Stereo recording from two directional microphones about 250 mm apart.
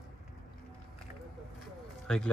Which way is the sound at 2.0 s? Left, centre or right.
Centre.